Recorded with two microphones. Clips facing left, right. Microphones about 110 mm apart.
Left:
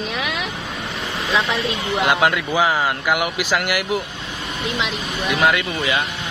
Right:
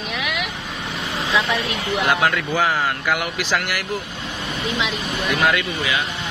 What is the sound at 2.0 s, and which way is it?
Speech, 15° left (ahead or behind).